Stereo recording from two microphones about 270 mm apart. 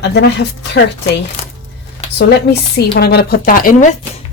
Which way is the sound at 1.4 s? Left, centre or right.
Left.